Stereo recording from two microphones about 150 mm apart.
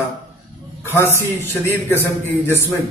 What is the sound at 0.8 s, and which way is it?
Speech, 15° left (ahead or behind).